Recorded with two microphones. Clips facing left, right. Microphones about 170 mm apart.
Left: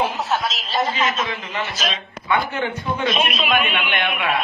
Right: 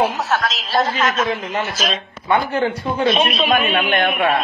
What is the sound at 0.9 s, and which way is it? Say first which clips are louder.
Speech: right 4 dB; 45° right (ahead or behind).